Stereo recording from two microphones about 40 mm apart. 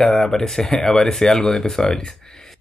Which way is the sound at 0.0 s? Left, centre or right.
Centre.